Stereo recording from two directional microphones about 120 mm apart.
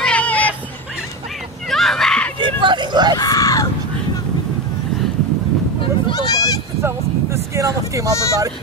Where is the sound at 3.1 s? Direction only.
30° left (ahead or behind).